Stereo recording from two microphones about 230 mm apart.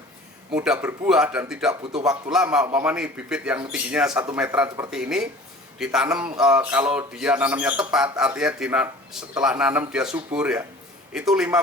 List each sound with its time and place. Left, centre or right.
0.5 s speech: centre